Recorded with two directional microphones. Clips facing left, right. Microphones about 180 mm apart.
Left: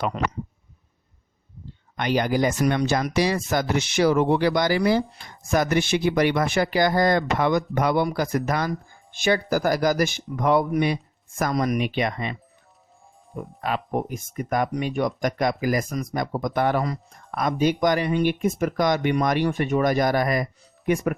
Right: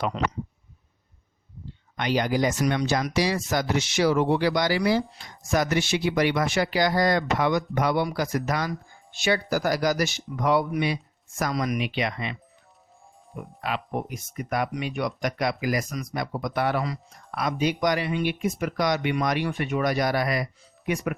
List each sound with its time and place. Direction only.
2.0 s speech: 50° left (ahead or behind)